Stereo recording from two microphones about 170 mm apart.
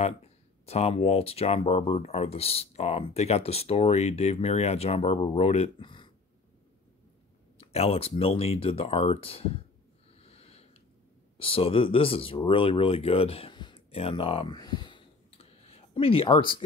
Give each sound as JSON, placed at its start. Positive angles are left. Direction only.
{"t": 0.7, "sound": "speech", "side_deg": 35}
{"t": 7.5, "sound": "speech", "side_deg": 40}
{"t": 10.1, "sound": "a sound", "side_deg": 35}
{"t": 11.3, "sound": "speech", "side_deg": 35}